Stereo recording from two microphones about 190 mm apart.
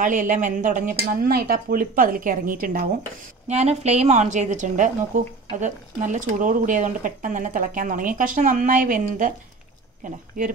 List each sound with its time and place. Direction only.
0.0 s a woman's voice: 45° right (ahead or behind)
3.4 s a woman's voice: 35° right (ahead or behind)